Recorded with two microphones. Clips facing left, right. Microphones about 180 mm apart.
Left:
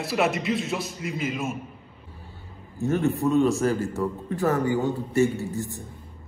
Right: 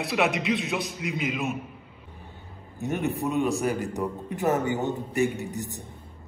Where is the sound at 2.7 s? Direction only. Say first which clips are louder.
Left 4 dB; 15° right (ahead or behind).